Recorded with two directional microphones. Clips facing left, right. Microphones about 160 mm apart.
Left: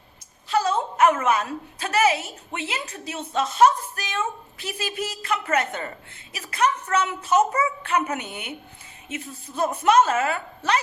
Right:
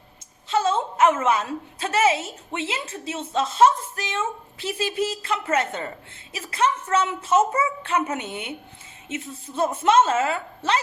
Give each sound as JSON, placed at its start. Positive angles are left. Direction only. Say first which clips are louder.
{"t": 0.4, "sound": "a woman's voice", "louder": "right 1 dB", "side_deg": -25}